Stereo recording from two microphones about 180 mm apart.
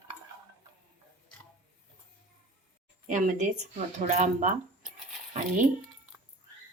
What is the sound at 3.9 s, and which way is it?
Speech, 40° right (ahead or behind).